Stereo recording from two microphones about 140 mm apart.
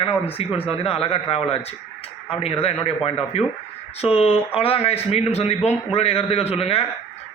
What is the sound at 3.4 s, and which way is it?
A man's voice, 45° left (ahead or behind).